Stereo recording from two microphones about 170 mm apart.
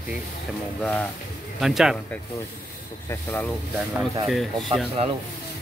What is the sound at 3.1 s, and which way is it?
Speech, 10° left (ahead or behind).